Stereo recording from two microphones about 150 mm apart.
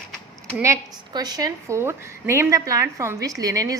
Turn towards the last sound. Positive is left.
turn(degrees=-20)  # may be behind; listen again after turning